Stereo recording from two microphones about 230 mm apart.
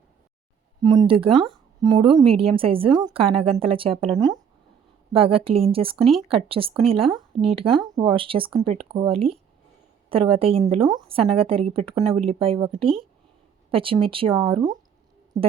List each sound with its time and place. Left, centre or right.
0.8 s a woman's voice: centre